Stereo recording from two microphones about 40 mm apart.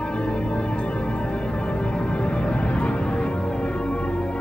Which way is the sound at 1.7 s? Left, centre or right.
Left.